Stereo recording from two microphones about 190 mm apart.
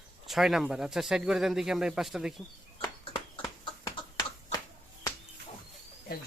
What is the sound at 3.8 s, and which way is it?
Finger snapping, 20° left (ahead or behind).